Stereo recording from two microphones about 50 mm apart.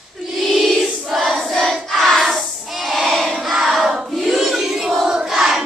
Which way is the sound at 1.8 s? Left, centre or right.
Centre.